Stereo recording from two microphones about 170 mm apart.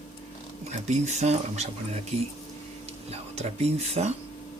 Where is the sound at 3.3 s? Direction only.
40° right (ahead or behind).